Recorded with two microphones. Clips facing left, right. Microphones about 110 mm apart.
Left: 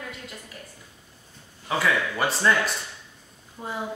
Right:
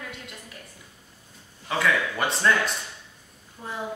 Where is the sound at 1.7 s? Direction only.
5° left (ahead or behind).